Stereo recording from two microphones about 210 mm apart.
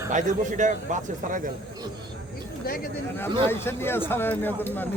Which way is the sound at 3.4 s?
10° left (ahead or behind).